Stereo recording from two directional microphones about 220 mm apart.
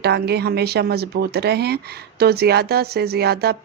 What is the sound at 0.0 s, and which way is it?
Speech, 45° right (ahead or behind).